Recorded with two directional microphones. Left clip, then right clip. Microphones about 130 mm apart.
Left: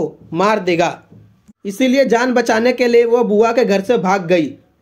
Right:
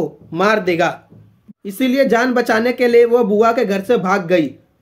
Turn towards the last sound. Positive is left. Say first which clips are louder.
# left 1 dB
turn(degrees=25)  # may be behind; listen again after turning